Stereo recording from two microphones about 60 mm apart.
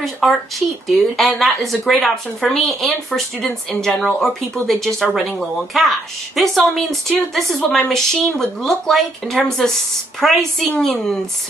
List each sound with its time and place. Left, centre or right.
0.0 s speech: centre
4.0 s speech: centre